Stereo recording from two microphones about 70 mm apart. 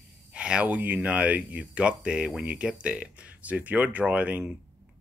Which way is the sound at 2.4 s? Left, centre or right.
Right.